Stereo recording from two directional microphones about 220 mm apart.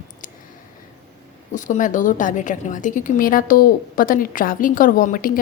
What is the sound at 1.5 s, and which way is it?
A woman's voice, 35° left (ahead or behind).